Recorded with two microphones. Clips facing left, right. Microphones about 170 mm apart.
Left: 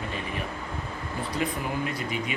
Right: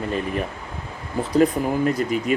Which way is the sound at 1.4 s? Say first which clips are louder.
Right 11 dB; 45° right (ahead or behind).